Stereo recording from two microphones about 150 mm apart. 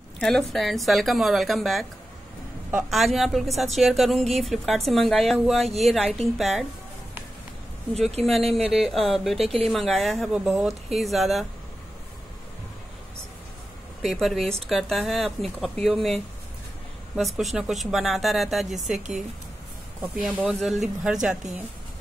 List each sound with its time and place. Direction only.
0.2 s a woman's voice: 5° left (ahead or behind)
8.3 s a woman's voice: centre (ahead or behind)
14.0 s a woman's voice: centre (ahead or behind)